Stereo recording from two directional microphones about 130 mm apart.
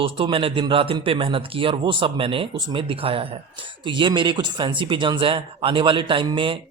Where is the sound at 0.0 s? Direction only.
45° right (ahead or behind).